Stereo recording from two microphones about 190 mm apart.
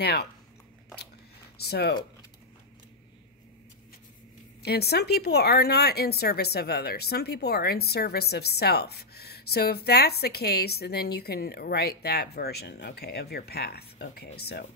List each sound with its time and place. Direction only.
0.0 s speech: 55° left (ahead or behind)
1.6 s speech: 60° left (ahead or behind)
4.6 s speech: 60° left (ahead or behind)